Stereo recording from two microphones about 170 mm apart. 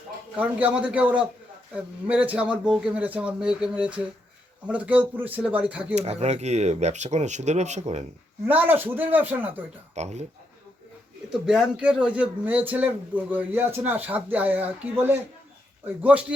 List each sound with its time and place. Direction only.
0.3 s a man's voice: 10° right (ahead or behind)
5.9 s speech: 40° right (ahead or behind)
8.4 s a man's voice: 10° right (ahead or behind)
9.9 s speech: 40° right (ahead or behind)
11.3 s a man's voice: 5° right (ahead or behind)